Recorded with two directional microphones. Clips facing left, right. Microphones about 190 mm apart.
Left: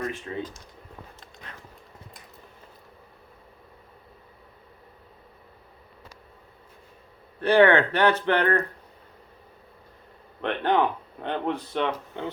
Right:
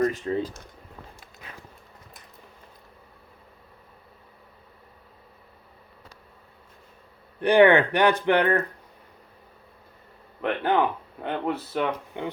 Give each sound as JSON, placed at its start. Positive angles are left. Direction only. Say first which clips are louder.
{"t": 0.0, "sound": "speech", "louder": "right 7 dB", "side_deg": -40}
{"t": 1.2, "sound": "dog", "louder": "even", "side_deg": -5}
{"t": 7.4, "sound": "speech", "louder": "right 1 dB", "side_deg": -15}
{"t": 10.4, "sound": "speech", "louder": "even", "side_deg": -10}